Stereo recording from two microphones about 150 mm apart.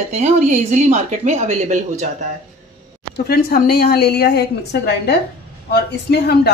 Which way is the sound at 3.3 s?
90° left.